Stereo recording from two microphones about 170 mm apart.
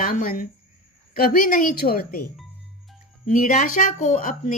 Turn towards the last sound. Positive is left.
turn(degrees=50)  # may be behind; listen again after turning